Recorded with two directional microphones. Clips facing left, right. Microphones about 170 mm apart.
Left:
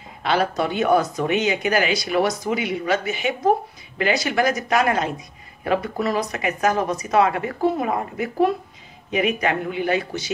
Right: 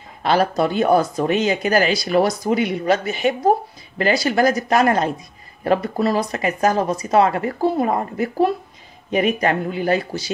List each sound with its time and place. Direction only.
0.2 s speech: 40° right (ahead or behind)